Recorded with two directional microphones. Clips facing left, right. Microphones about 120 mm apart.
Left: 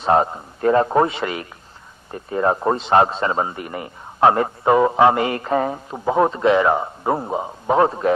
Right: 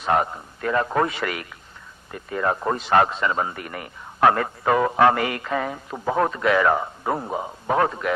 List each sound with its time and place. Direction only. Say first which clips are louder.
0.0 s a man's voice: left 5 dB; 30° left (ahead or behind)
5.9 s a man's voice: left 4 dB; 20° left (ahead or behind)